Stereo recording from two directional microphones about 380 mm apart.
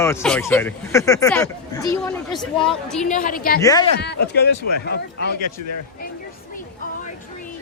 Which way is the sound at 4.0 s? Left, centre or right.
Left.